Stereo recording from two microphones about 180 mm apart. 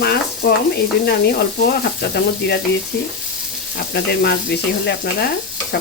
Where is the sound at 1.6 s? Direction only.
60° left (ahead or behind).